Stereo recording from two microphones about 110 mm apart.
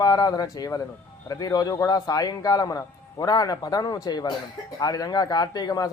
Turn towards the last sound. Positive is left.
turn(degrees=35)  # may be behind; listen again after turning